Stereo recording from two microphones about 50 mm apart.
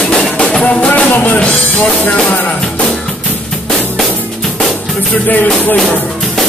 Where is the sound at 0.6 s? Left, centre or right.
Left.